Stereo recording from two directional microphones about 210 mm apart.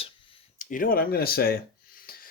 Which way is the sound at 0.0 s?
25° left (ahead or behind).